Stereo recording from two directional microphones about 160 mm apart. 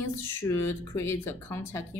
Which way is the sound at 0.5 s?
15° left (ahead or behind).